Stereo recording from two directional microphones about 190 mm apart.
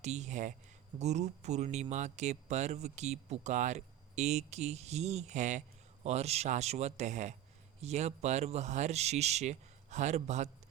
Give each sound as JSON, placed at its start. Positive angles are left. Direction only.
{"t": 0.0, "sound": "speech", "side_deg": -35}